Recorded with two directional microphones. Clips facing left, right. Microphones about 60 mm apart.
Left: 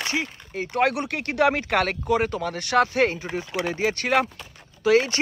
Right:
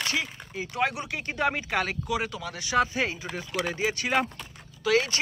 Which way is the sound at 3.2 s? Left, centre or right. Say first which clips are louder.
Left 3 dB; left.